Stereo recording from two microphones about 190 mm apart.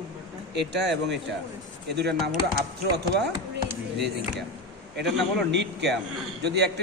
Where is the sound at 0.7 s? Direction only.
65° right (ahead or behind).